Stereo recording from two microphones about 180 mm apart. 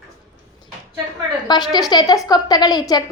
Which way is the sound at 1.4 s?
20° left (ahead or behind).